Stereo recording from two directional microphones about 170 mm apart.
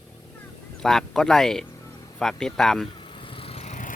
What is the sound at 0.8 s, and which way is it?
Speech, centre (ahead or behind).